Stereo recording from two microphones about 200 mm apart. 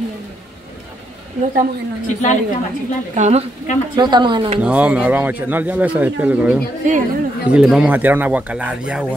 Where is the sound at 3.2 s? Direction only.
35° right (ahead or behind).